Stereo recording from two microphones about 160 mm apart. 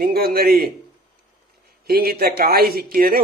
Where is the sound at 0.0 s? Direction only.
70° right (ahead or behind).